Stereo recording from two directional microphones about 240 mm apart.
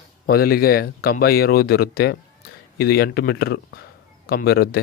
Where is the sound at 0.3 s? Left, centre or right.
Left.